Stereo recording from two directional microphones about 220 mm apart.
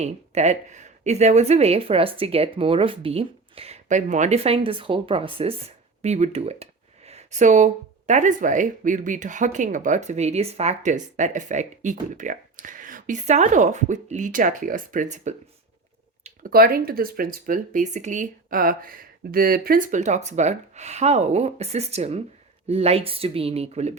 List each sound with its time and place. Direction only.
0.0 s a woman's voice: 30° right (ahead or behind)